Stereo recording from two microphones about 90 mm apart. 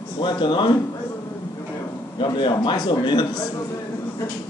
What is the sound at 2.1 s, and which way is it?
A man's voice, 65° left (ahead or behind).